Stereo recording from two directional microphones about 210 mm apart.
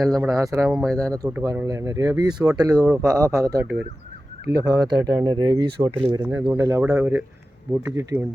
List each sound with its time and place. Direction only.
0.3 s speech: 15° right (ahead or behind)
0.8 s speech: centre (ahead or behind)
1.2 s speech: 15° right (ahead or behind)